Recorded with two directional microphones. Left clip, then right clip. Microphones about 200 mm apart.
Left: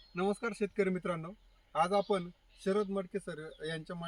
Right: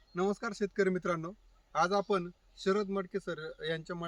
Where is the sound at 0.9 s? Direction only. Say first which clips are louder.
Right 3 dB; 15° right (ahead or behind).